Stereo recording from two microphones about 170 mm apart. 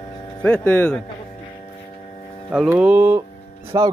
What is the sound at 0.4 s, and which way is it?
Speech, 10° left (ahead or behind).